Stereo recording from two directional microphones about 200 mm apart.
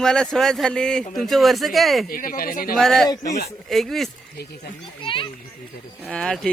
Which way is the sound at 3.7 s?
Centre (ahead or behind).